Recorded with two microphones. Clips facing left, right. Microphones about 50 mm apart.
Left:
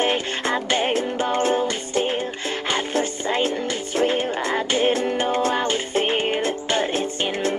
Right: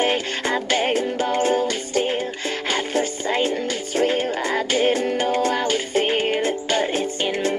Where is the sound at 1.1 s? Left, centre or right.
Left.